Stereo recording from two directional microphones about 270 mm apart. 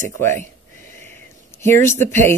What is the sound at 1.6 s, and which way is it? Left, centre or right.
Speech, centre.